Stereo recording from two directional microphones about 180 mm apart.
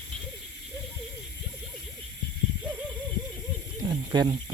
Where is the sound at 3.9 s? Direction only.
25° right (ahead or behind).